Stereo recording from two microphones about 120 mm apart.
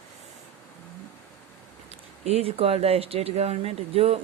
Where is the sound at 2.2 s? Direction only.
60° right (ahead or behind).